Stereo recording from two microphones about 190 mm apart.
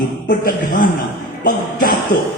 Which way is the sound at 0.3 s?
45° left (ahead or behind).